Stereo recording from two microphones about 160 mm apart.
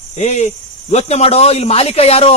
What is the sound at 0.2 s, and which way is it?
A man's voice, 45° left (ahead or behind).